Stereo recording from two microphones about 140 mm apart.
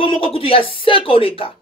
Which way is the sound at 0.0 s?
40° left (ahead or behind).